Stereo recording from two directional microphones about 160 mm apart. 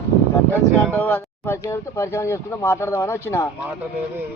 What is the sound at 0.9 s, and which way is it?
Speech, 10° left (ahead or behind).